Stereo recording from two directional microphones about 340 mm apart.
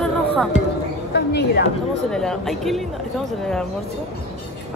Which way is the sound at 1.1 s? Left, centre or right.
Left.